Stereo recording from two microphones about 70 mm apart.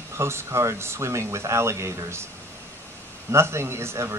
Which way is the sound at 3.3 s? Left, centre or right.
Right.